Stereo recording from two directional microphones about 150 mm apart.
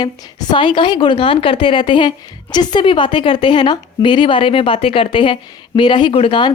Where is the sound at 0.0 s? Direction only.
25° left (ahead or behind).